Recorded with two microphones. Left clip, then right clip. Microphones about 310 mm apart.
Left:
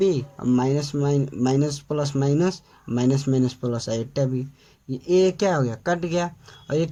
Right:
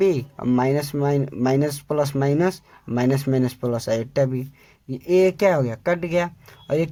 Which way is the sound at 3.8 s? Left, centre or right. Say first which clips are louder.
Right 6 dB; right.